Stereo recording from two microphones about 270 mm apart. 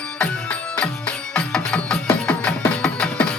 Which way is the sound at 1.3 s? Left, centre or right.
Centre.